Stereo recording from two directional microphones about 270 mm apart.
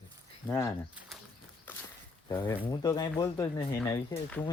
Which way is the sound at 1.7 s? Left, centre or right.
Centre.